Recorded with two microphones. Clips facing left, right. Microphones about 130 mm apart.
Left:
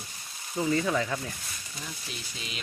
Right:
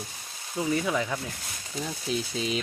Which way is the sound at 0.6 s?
10° right (ahead or behind).